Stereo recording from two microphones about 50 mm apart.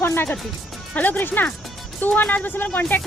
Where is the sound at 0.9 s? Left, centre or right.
Left.